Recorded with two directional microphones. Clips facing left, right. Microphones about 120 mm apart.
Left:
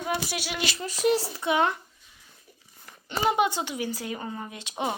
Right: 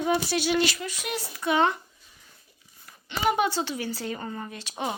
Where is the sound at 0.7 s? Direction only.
35° left (ahead or behind).